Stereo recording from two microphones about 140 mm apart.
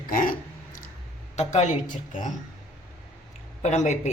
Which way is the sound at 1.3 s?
55° left (ahead or behind).